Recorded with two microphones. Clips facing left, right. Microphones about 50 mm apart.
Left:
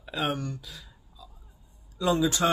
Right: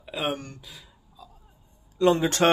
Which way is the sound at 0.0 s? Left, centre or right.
Centre.